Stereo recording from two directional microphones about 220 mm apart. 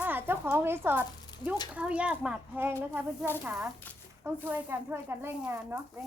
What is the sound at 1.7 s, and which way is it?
Speech, 5° right (ahead or behind).